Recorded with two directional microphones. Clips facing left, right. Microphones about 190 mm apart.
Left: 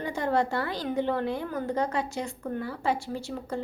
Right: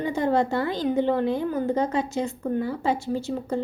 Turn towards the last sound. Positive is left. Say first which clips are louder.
# right 6 dB
turn(degrees=-25)  # may be behind; listen again after turning